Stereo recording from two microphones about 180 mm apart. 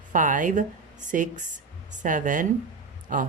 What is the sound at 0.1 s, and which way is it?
Speech, 45° right (ahead or behind).